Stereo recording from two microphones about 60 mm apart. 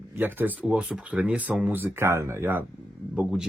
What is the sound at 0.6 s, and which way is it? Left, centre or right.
Speech, centre.